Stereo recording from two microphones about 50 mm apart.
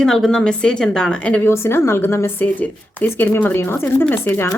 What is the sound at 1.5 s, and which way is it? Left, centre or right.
Speech, left.